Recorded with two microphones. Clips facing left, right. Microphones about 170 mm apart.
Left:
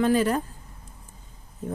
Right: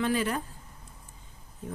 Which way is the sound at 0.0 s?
40° left (ahead or behind).